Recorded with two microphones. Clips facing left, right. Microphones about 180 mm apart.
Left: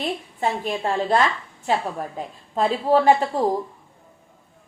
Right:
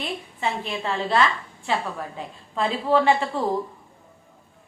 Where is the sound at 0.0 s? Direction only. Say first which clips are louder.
Left 3 dB; 45° left (ahead or behind).